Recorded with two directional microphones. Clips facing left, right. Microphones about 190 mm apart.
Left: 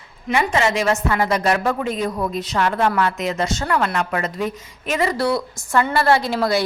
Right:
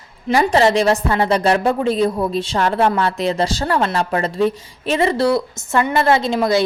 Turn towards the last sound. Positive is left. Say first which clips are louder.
# right 2 dB
turn(degrees=-20)  # may be behind; listen again after turning